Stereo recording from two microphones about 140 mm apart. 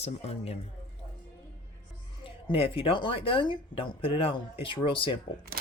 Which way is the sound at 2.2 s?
40° left (ahead or behind).